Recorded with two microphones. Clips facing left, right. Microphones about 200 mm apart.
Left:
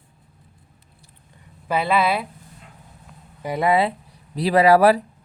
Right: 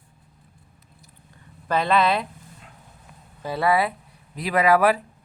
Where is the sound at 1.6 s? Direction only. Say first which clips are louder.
Even; 10° left (ahead or behind).